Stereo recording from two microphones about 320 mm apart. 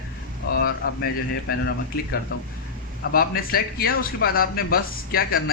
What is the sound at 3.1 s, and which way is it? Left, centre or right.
A man's voice, left.